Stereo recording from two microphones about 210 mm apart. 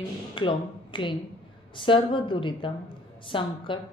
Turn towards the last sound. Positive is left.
turn(degrees=25)  # may be behind; listen again after turning